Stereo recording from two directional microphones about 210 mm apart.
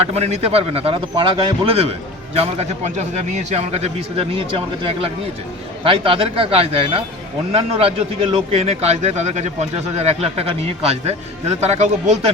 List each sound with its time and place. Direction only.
0.0 s a man's voice: 30° right (ahead or behind)